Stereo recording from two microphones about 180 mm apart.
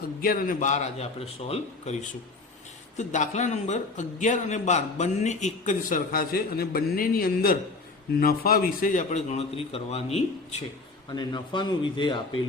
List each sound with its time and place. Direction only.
0.2 s a man's voice: 50° left (ahead or behind); by 10.2 s 35° left (ahead or behind)
11.1 s a man's voice: 25° left (ahead or behind)